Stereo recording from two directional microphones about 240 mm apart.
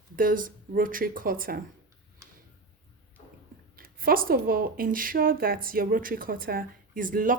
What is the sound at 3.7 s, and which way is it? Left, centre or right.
A woman's voice, right.